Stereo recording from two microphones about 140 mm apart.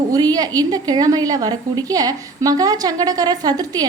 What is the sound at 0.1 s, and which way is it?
A woman's voice, 30° right (ahead or behind).